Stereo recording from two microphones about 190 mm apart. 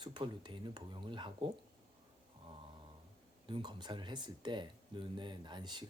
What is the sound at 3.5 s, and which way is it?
Speech, 25° right (ahead or behind).